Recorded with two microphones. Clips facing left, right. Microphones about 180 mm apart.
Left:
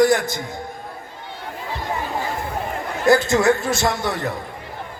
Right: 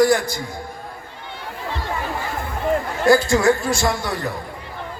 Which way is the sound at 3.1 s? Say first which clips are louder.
Even; 20° left (ahead or behind).